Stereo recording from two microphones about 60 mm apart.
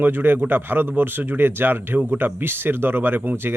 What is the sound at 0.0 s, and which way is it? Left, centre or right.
Speech, right.